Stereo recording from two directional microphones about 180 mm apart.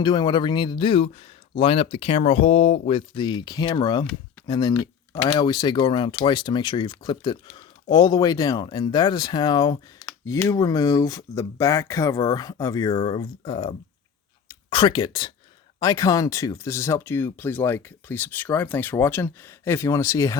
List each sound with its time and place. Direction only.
0.0 s speech: 25° left (ahead or behind)